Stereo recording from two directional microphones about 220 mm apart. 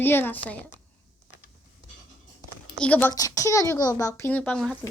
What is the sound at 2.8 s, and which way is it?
Speech, 5° left (ahead or behind).